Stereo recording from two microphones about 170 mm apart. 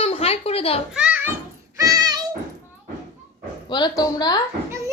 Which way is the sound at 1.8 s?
20° right (ahead or behind).